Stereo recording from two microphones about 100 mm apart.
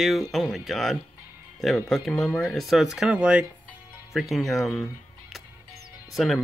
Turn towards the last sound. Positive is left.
turn(degrees=0)  # may be behind; listen again after turning